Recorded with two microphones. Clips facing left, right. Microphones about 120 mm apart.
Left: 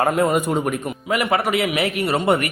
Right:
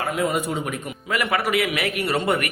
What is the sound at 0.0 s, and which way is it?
Speech, 50° left (ahead or behind).